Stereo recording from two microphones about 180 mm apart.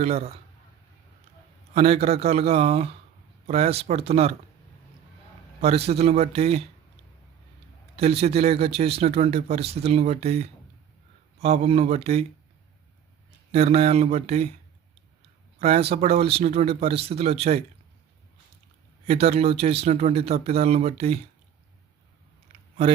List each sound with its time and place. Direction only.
0.0 s speech: 35° right (ahead or behind)
1.7 s speech: 35° right (ahead or behind)
5.5 s speech: 35° right (ahead or behind)
7.9 s speech: 35° right (ahead or behind)
13.5 s speech: 35° right (ahead or behind)
15.5 s speech: 35° right (ahead or behind)
19.0 s speech: 35° right (ahead or behind)